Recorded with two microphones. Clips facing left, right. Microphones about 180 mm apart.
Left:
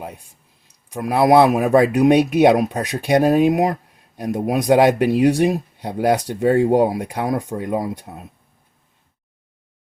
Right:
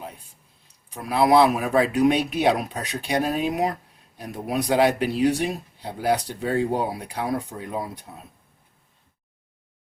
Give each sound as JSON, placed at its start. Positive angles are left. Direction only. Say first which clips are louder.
{"t": 0.9, "sound": "speech", "louder": "left 4 dB", "side_deg": 50}